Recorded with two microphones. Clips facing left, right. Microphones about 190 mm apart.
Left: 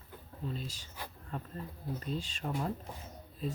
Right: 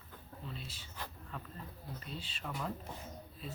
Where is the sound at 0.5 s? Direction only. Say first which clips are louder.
Left 6 dB; 40° left (ahead or behind).